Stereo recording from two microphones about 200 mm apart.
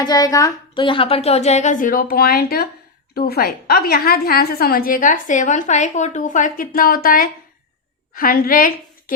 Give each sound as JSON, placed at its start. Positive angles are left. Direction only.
{"t": 0.0, "sound": "a woman's voice", "side_deg": 20}